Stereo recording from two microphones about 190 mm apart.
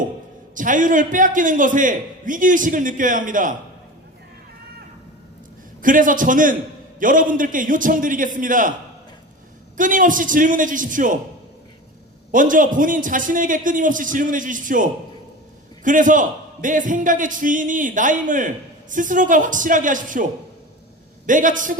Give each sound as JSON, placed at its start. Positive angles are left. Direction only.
{"t": 0.5, "sound": "a man's voice", "side_deg": -45}
{"t": 5.8, "sound": "a man's voice", "side_deg": -45}
{"t": 9.7, "sound": "a man's voice", "side_deg": -45}
{"t": 12.3, "sound": "a man's voice", "side_deg": -45}
{"t": 21.2, "sound": "a man's voice", "side_deg": -45}